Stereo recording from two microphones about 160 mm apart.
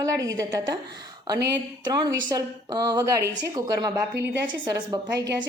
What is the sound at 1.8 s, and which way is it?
A woman's voice, 25° right (ahead or behind).